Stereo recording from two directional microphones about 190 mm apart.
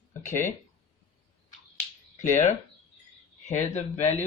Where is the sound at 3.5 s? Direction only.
40° left (ahead or behind).